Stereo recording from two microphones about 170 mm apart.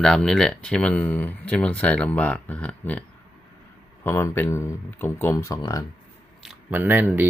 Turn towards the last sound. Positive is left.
turn(degrees=-10)  # may be behind; listen again after turning